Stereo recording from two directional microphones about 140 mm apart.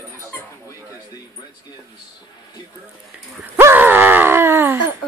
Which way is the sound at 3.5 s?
15° right (ahead or behind).